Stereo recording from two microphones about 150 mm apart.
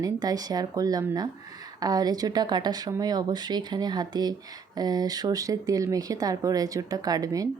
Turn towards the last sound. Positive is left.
turn(degrees=-25)  # may be behind; listen again after turning